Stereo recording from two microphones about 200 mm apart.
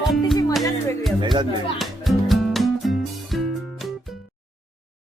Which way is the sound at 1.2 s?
25° right (ahead or behind).